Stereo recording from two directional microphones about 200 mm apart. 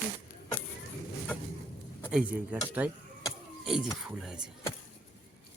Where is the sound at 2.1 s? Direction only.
5° right (ahead or behind).